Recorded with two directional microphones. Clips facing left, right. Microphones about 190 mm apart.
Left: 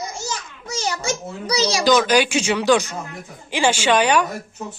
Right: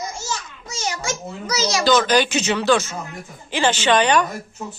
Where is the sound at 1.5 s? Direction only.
30° left (ahead or behind).